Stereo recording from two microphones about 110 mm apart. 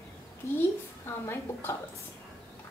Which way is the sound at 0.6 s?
25° left (ahead or behind).